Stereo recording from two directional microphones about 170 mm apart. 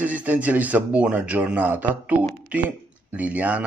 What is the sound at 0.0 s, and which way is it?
Speech, 10° right (ahead or behind).